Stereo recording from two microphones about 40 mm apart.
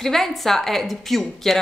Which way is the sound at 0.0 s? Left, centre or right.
Centre.